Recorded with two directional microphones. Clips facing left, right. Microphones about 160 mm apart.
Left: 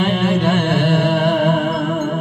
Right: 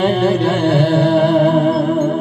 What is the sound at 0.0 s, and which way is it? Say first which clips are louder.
Music: right 3 dB; 40° right (ahead or behind).